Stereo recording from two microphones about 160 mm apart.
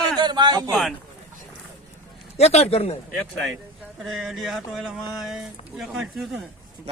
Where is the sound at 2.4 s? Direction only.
40° left (ahead or behind).